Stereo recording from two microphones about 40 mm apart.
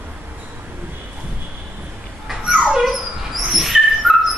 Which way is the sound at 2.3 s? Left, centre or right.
Centre.